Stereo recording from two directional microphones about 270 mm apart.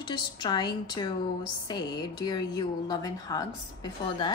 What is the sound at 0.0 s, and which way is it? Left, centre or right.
A woman's voice, centre.